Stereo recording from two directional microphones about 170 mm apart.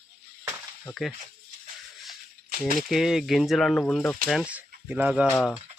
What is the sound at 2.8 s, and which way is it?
Speech, centre (ahead or behind).